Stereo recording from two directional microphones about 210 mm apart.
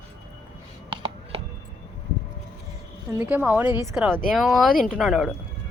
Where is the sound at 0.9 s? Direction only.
20° right (ahead or behind).